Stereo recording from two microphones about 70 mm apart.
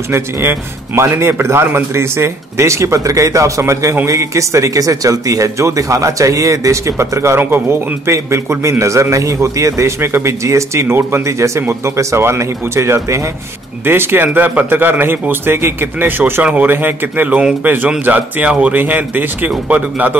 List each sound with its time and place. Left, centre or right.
0.1 s speech: right
13.8 s speech: right